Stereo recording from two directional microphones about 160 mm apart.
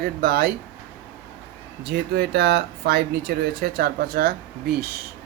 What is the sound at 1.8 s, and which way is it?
Speech, 90° right.